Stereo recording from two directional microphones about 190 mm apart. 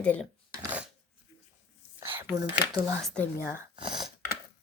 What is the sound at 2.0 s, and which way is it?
Whispering, 15° right (ahead or behind).